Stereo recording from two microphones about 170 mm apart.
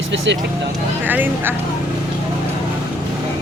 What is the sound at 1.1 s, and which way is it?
Speech, 10° right (ahead or behind).